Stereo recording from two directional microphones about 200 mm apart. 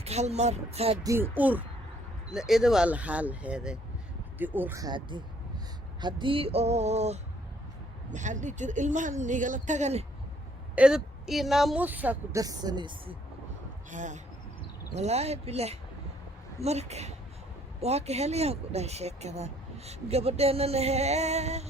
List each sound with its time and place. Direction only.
0.0 s speech: 35° right (ahead or behind)
1.0 s a woman's voice: 10° right (ahead or behind); by 10.1 s 35° right (ahead or behind)
10.8 s a woman's voice: 5° right (ahead or behind); by 13.1 s 25° right (ahead or behind)
13.9 s speech: 40° right (ahead or behind)